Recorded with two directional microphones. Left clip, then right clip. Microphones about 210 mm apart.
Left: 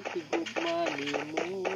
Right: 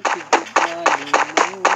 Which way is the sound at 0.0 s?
55° right (ahead or behind).